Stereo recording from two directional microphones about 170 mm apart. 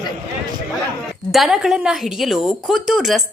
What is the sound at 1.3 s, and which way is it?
A woman's voice, centre (ahead or behind).